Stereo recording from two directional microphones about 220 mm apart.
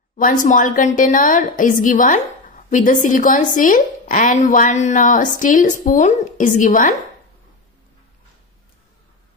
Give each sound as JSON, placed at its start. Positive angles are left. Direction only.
{"t": 0.2, "sound": "a woman's voice", "side_deg": 35}